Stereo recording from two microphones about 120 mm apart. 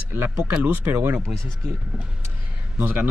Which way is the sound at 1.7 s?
10° right (ahead or behind).